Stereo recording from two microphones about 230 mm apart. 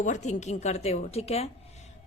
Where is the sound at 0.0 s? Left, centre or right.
Left.